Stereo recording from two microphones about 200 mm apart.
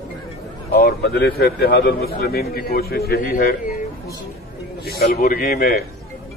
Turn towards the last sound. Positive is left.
turn(degrees=50)  # may be behind; listen again after turning